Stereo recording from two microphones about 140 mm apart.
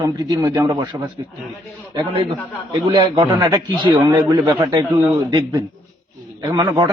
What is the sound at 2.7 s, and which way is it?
A man's voice, 30° right (ahead or behind).